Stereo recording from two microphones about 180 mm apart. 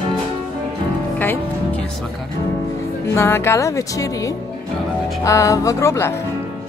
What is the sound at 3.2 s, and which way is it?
Speech, 15° left (ahead or behind).